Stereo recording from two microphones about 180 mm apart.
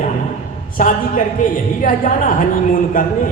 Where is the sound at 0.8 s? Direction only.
50° left (ahead or behind).